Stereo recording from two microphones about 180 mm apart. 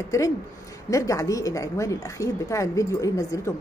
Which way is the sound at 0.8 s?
20° left (ahead or behind).